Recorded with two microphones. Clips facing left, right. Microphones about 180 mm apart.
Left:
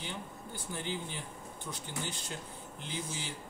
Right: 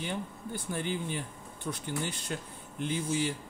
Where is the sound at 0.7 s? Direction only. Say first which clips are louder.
Right 5 dB; 60° right (ahead or behind).